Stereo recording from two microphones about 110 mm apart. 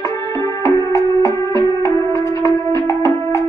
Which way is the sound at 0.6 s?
25° left (ahead or behind).